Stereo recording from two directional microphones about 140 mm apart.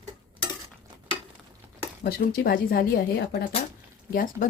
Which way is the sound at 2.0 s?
90° left.